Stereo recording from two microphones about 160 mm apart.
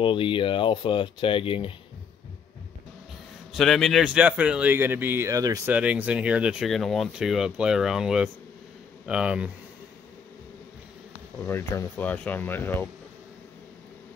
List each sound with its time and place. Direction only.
0.0 s speech: 35° left (ahead or behind)
3.5 s speech: centre (ahead or behind); by 5.6 s 20° right (ahead or behind)
5.7 s speech: 10° right (ahead or behind)
11.4 s speech: 15° left (ahead or behind)